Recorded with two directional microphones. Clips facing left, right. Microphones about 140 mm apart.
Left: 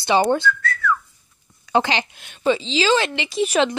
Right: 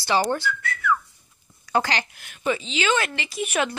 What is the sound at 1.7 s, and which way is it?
A woman's voice, 20° left (ahead or behind).